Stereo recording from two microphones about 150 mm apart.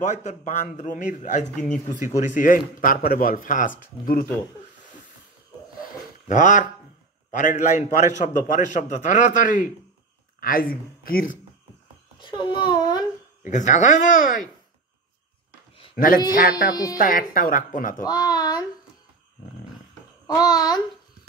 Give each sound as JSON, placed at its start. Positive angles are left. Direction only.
{"t": 0.0, "sound": "a man's voice", "side_deg": 50}
{"t": 5.8, "sound": "a sound", "side_deg": 60}
{"t": 7.2, "sound": "a man's voice", "side_deg": 55}
{"t": 10.4, "sound": "speech", "side_deg": 75}
{"t": 12.2, "sound": "a child's voice", "side_deg": 30}
{"t": 13.4, "sound": "a man's voice", "side_deg": 55}
{"t": 16.3, "sound": "speech", "side_deg": 80}
{"t": 16.7, "sound": "a child's voice", "side_deg": 25}
{"t": 17.0, "sound": "a man's voice", "side_deg": 70}
{"t": 18.0, "sound": "a sound", "side_deg": 25}
{"t": 20.2, "sound": "a child's voice", "side_deg": 25}